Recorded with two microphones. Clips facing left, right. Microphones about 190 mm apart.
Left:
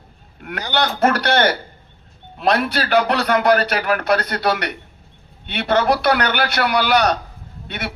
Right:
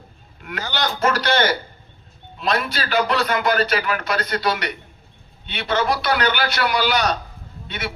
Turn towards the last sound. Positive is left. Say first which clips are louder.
# left 1 dB
turn(degrees=60)  # may be behind; listen again after turning